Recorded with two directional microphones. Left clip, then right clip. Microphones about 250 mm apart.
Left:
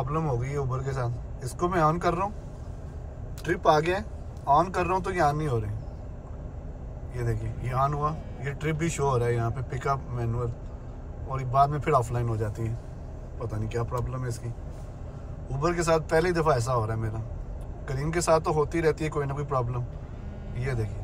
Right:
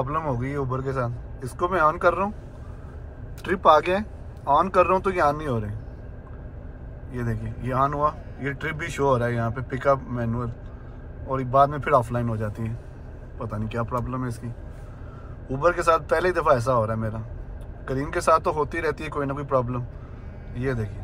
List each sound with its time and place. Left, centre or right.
0.0 s a man's voice: centre
3.4 s a man's voice: centre
7.2 s a man's voice: centre
15.5 s a man's voice: centre